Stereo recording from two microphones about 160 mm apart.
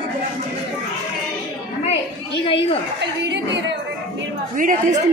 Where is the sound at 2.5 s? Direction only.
35° left (ahead or behind).